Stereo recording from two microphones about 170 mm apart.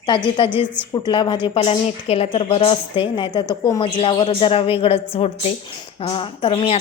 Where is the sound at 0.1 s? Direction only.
25° left (ahead or behind).